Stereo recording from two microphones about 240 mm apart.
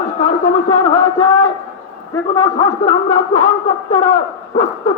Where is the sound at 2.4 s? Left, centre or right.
Left.